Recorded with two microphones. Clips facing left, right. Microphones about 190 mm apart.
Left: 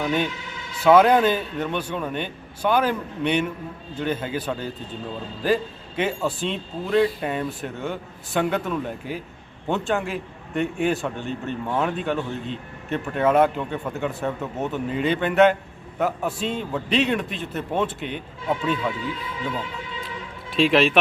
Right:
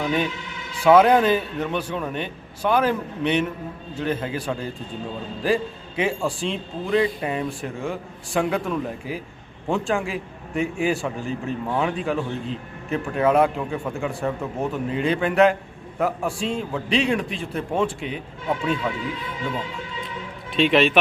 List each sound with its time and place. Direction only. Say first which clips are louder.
0.0 s a man's voice: even; centre (ahead or behind)
1.5 s a man's voice: right 1 dB; 5° left (ahead or behind)
1.9 s a man's voice: even; 5° right (ahead or behind)
6.0 s a man's voice: right 1 dB; centre (ahead or behind)
20.5 s a man's voice: even; centre (ahead or behind)